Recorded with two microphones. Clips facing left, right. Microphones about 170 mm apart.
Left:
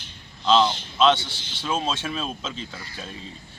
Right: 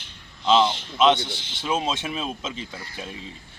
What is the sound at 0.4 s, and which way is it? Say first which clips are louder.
A man's voice: even; 20° right (ahead or behind).